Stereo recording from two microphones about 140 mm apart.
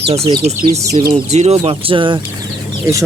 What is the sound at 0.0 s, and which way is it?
Speech, 45° right (ahead or behind).